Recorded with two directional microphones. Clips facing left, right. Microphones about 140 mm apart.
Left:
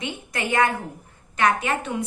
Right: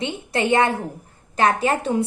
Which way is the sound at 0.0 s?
25° right (ahead or behind).